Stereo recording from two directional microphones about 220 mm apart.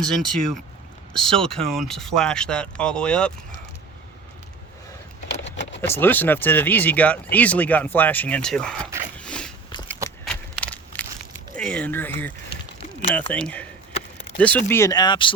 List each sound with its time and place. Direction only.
0.0 s speech: centre (ahead or behind)
5.8 s speech: 10° left (ahead or behind)
9.1 s biting: 5° left (ahead or behind)
10.2 s a sound: 5° left (ahead or behind)
11.5 s speech: 5° left (ahead or behind)